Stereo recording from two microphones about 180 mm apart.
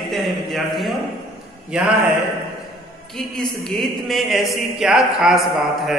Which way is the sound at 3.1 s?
Centre (ahead or behind).